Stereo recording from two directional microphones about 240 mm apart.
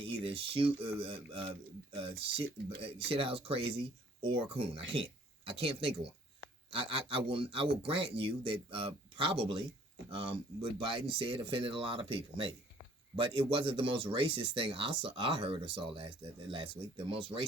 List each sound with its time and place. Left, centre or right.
0.0 s a sound: right
0.8 s speech: right
17.1 s speech: right